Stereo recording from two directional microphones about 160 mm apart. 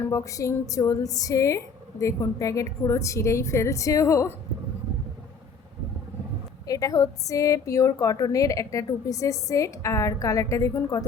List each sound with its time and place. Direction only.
0.0 s a woman's voice: 20° left (ahead or behind)
6.7 s a woman's voice: 20° left (ahead or behind)